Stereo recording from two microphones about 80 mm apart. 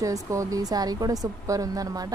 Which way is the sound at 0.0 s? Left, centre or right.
Right.